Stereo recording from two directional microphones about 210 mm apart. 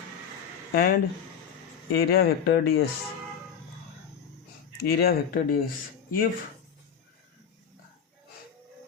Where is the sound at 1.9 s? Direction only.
45° left (ahead or behind).